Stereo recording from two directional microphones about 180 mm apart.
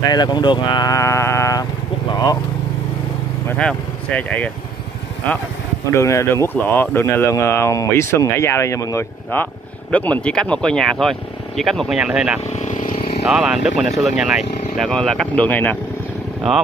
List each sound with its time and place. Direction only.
0.0 s speech: 25° left (ahead or behind)
3.4 s speech: 5° left (ahead or behind)
5.9 s speech: 15° left (ahead or behind); by 12.4 s 5° right (ahead or behind)
12.4 s vehicle: 40° left (ahead or behind)
13.3 s speech: 5° right (ahead or behind)